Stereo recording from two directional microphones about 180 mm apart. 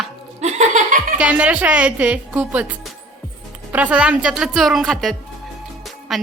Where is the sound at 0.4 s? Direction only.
40° right (ahead or behind).